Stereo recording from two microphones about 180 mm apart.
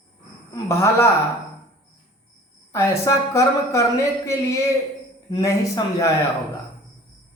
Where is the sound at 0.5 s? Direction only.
15° left (ahead or behind).